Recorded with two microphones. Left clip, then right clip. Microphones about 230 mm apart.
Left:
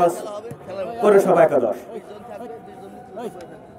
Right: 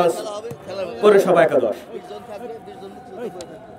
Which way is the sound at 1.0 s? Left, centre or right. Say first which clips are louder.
Right 1 dB; centre.